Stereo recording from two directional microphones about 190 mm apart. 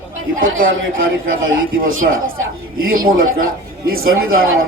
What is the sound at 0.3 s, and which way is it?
A man's voice, 90° right.